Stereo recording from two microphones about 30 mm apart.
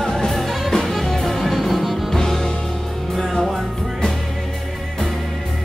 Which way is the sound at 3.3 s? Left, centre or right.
Centre.